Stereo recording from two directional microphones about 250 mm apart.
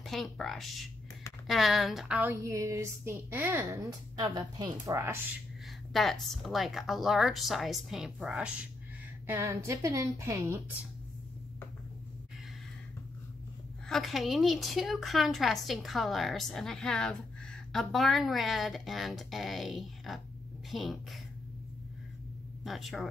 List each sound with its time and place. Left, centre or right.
0.0 s a woman's voice: centre
5.9 s a woman's voice: centre
13.8 s a woman's voice: centre
22.6 s speech: centre